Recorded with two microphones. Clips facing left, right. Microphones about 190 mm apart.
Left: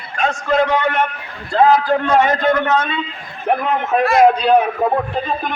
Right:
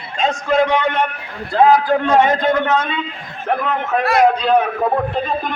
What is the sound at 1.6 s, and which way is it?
A man's voice, 15° right (ahead or behind).